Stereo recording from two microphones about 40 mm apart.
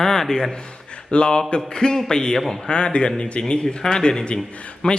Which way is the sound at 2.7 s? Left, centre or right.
Left.